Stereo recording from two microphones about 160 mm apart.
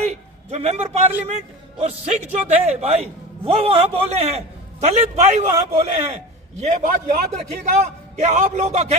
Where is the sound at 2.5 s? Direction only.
40° right (ahead or behind).